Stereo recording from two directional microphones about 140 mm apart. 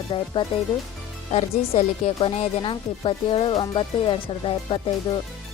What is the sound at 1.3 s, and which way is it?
Speech, 50° left (ahead or behind).